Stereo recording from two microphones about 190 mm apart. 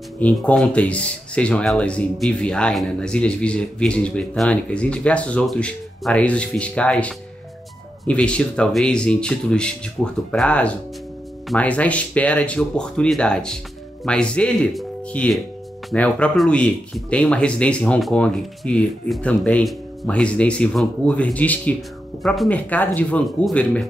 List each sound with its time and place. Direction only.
0.2 s speech: 5° left (ahead or behind)